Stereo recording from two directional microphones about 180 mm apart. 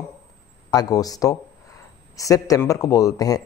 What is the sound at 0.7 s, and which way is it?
Speech, 20° left (ahead or behind).